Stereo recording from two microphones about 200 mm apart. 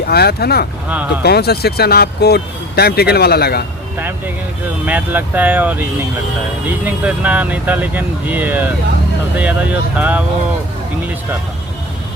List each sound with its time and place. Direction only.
0.1 s speech: 50° left (ahead or behind)
4.9 s speech: 10° right (ahead or behind)